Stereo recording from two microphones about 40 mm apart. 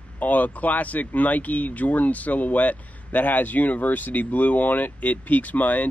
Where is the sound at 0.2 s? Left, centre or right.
Left.